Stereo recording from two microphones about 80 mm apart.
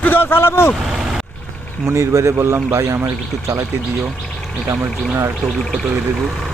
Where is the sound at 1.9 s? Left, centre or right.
Right.